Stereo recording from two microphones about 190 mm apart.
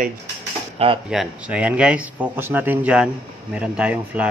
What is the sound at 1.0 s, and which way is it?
A man's voice, 5° right (ahead or behind).